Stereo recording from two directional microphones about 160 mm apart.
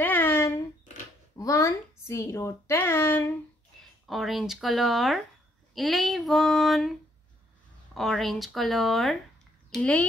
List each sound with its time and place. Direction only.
0.0 s a sound: 10° left (ahead or behind)
1.3 s a woman's voice: 20° left (ahead or behind)
4.1 s female singing: centre (ahead or behind)
9.7 s speech: 5° left (ahead or behind)